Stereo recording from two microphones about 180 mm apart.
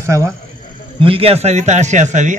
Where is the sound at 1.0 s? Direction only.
30° right (ahead or behind).